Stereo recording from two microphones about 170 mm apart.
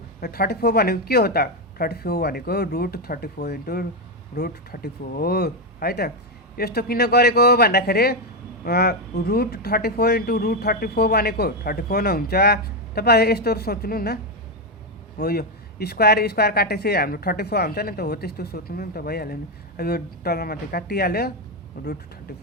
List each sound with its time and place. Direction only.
0.2 s a woman's voice: 65° left (ahead or behind)
15.2 s speech: 70° left (ahead or behind)